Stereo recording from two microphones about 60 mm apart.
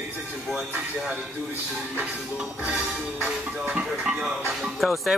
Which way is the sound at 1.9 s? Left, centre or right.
Right.